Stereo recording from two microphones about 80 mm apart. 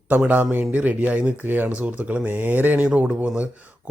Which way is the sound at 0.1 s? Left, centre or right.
Right.